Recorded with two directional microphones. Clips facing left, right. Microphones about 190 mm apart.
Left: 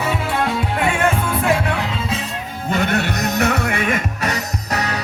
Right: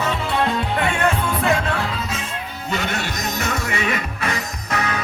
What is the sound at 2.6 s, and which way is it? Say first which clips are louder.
Music: left 6 dB; 55° left (ahead or behind).